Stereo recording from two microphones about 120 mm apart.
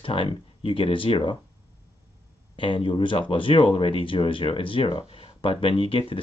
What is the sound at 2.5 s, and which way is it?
Speech, 45° left (ahead or behind).